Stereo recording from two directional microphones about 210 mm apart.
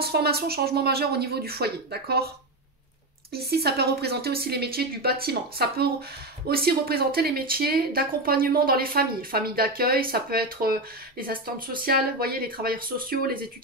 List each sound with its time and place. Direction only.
0.0 s speech: 50° right (ahead or behind)
3.3 s speech: 50° right (ahead or behind)